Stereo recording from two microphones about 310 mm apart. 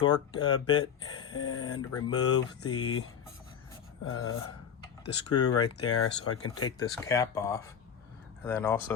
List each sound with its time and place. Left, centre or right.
0.0 s speech: centre
0.5 s speech: left
4.0 s a sound: left
5.3 s speech: centre
5.8 s speech: left
6.7 s speech: centre